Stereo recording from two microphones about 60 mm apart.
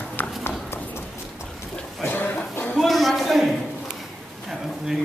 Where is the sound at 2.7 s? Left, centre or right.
Centre.